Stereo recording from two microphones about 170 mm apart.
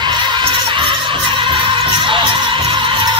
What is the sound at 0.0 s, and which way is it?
Music, 25° right (ahead or behind).